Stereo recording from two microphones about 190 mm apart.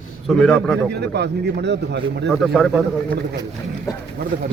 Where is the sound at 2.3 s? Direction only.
Centre (ahead or behind).